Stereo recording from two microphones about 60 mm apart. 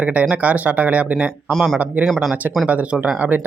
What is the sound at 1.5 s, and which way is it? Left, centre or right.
Speech, centre.